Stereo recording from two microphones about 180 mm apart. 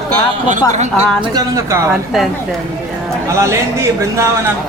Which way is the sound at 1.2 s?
20° right (ahead or behind).